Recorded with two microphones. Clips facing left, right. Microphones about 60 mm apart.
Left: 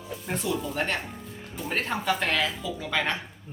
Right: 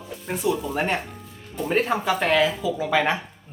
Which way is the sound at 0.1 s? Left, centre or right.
Centre.